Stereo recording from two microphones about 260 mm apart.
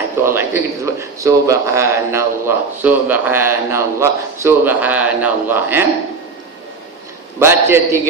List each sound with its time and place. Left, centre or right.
0.2 s a man's voice: centre
7.3 s a man's voice: centre